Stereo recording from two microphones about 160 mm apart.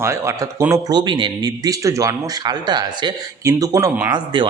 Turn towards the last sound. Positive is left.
turn(degrees=-30)  # may be behind; listen again after turning